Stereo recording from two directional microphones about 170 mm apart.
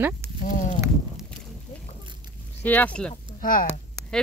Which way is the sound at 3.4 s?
55° left (ahead or behind).